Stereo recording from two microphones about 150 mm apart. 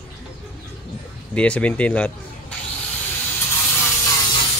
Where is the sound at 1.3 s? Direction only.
10° left (ahead or behind).